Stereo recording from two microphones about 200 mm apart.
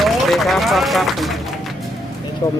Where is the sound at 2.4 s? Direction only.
15° left (ahead or behind).